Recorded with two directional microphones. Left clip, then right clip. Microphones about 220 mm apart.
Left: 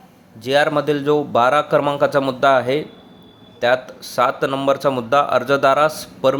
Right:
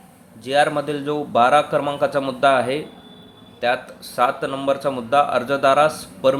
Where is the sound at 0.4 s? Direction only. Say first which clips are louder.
Left 2 dB; 20° left (ahead or behind).